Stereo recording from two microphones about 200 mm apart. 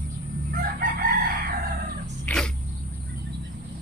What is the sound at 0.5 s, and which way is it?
Chicken, 45° right (ahead or behind).